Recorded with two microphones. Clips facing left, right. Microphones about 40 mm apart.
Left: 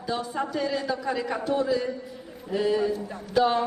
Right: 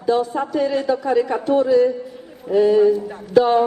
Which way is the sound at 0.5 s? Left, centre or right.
Centre.